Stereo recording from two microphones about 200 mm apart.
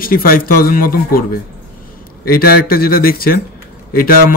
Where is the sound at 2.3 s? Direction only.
50° left (ahead or behind).